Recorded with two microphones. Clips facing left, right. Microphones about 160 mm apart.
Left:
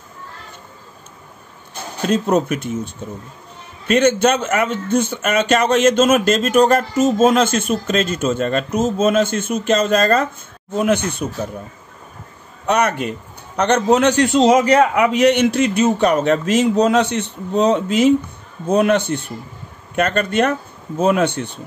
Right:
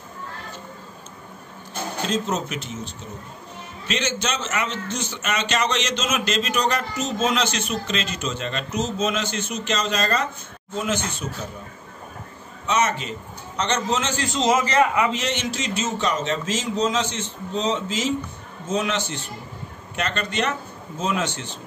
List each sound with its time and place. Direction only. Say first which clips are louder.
2.0 s a man's voice: left 10 dB; 60° left (ahead or behind)
12.6 s a man's voice: left 5 dB; 60° left (ahead or behind)